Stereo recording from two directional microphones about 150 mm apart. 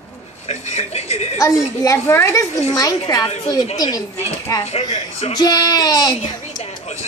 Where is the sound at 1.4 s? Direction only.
20° left (ahead or behind).